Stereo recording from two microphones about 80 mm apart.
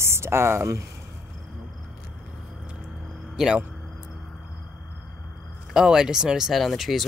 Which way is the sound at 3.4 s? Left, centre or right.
Centre.